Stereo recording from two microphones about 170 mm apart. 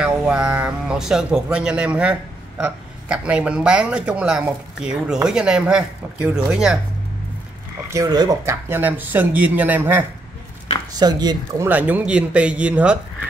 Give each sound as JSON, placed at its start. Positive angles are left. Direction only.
{"t": 0.0, "sound": "speech", "side_deg": -5}
{"t": 7.9, "sound": "speech", "side_deg": -20}
{"t": 10.9, "sound": "speech", "side_deg": -25}
{"t": 11.7, "sound": "speech", "side_deg": -10}